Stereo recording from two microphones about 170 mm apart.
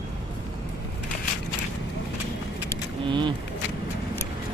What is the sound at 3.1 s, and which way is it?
Speech, 30° right (ahead or behind).